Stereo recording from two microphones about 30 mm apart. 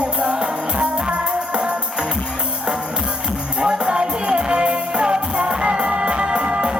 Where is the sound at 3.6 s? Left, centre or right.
Right.